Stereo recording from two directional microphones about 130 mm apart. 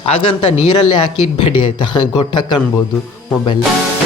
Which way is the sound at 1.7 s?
35° left (ahead or behind).